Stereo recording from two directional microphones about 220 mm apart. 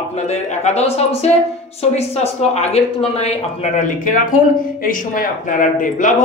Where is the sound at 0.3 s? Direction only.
30° left (ahead or behind).